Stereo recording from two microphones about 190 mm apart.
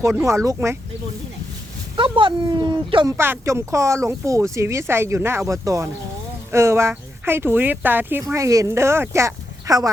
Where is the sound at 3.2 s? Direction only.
10° right (ahead or behind).